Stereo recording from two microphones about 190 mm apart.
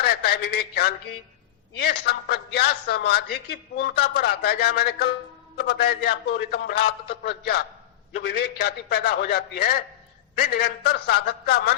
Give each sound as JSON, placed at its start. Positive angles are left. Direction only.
{"t": 0.0, "sound": "a man's voice", "side_deg": 55}